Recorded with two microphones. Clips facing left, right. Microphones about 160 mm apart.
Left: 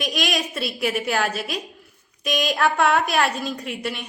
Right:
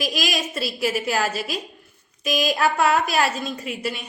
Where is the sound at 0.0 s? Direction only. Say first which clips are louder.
Even; centre (ahead or behind).